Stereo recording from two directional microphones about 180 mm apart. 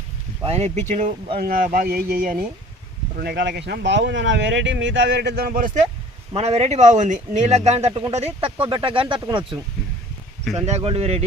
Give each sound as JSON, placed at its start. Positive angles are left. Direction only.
{"t": 0.4, "sound": "speech", "side_deg": -35}
{"t": 1.4, "sound": "speech", "side_deg": -50}
{"t": 3.2, "sound": "speech", "side_deg": -65}
{"t": 6.3, "sound": "speech", "side_deg": -35}
{"t": 10.7, "sound": "speech", "side_deg": -35}